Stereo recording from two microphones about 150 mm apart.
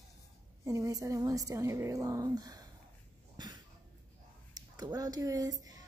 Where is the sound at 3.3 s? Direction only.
30° right (ahead or behind).